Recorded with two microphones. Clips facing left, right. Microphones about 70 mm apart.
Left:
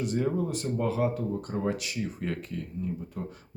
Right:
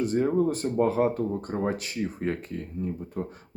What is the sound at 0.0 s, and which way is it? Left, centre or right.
Speech, right.